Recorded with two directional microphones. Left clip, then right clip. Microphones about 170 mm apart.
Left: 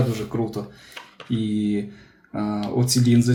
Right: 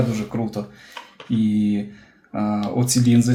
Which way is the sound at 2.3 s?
30° right (ahead or behind).